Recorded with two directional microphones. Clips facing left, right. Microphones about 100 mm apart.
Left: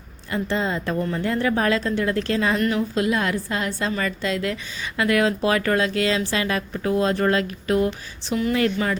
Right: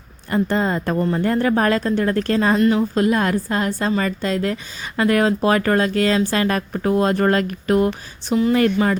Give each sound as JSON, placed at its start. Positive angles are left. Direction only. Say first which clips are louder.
{"t": 0.3, "sound": "speech", "louder": "right 5 dB", "side_deg": -45}
{"t": 2.6, "sound": "speech", "louder": "right 6 dB", "side_deg": -30}
{"t": 2.9, "sound": "a woman's voice", "louder": "right 4 dB", "side_deg": -40}